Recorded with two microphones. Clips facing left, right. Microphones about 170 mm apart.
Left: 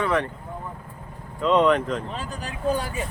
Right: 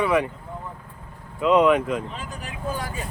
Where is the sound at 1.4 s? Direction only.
5° right (ahead or behind).